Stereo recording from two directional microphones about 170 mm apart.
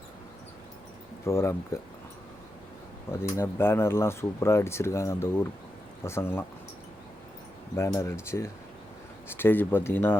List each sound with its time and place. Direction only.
1.2 s speech: 15° left (ahead or behind)
3.1 s speech: 15° left (ahead or behind)
7.8 s speech: 15° left (ahead or behind)